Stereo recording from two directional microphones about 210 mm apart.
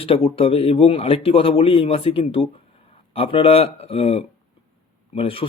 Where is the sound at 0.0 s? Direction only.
25° left (ahead or behind).